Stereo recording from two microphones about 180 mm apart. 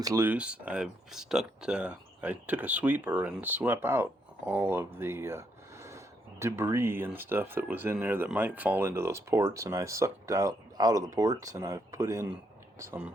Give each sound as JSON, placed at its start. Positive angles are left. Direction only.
{"t": 0.0, "sound": "speech", "side_deg": -15}